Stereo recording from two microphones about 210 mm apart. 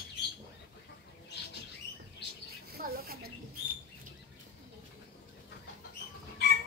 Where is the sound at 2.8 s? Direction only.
45° right (ahead or behind).